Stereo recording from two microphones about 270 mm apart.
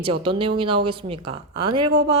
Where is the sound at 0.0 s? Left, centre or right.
Centre.